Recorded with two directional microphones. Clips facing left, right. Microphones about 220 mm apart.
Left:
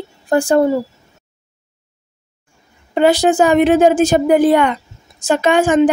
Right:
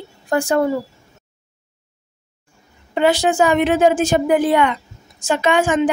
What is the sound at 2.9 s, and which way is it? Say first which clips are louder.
A woman's voice: left 4 dB; 40° left (ahead or behind).